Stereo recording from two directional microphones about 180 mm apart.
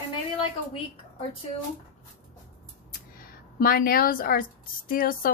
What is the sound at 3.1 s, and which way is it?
A woman's voice, 55° left (ahead or behind).